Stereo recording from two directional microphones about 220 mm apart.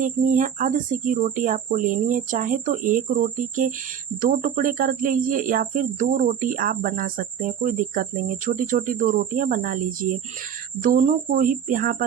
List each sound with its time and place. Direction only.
0.0 s speech: 35° right (ahead or behind)